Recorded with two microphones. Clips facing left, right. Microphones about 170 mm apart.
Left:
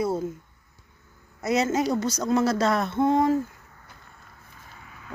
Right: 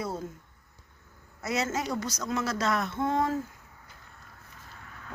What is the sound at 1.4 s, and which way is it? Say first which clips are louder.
Speech: left 7 dB; 20° left (ahead or behind).